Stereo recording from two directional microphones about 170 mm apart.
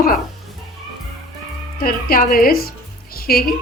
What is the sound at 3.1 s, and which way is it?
Music, 60° left (ahead or behind).